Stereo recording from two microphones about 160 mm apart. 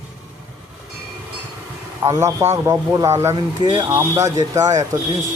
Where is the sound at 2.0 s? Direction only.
15° right (ahead or behind).